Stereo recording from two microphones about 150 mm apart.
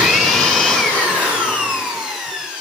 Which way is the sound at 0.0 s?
Centre (ahead or behind).